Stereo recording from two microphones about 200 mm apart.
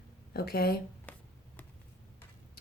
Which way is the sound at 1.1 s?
10° left (ahead or behind).